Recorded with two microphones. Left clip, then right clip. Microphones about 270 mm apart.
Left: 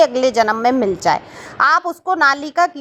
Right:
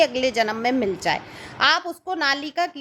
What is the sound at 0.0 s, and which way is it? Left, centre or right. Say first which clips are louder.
A woman's voice: left 7 dB; centre.